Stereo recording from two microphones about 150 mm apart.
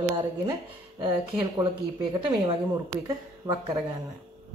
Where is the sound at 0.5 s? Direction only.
30° right (ahead or behind).